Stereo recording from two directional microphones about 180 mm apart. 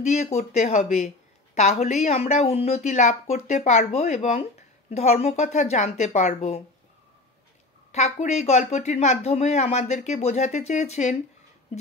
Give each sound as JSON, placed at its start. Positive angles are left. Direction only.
{"t": 0.0, "sound": "a woman's voice", "side_deg": 40}
{"t": 7.9, "sound": "a woman's voice", "side_deg": 40}